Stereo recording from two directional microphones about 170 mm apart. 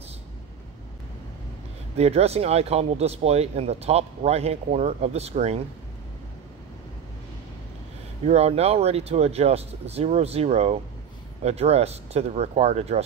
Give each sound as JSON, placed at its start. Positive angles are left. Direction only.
{"t": 2.0, "sound": "speech", "side_deg": -40}
{"t": 8.3, "sound": "speech", "side_deg": -40}